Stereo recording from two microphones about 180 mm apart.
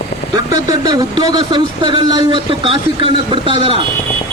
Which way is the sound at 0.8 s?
20° right (ahead or behind).